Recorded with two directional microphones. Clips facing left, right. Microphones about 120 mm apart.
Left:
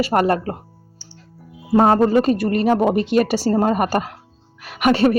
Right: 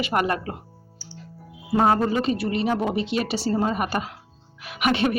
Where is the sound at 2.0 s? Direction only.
50° left (ahead or behind).